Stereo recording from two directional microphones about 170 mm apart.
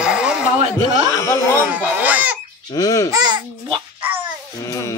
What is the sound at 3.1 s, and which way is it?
Babbling, 25° right (ahead or behind).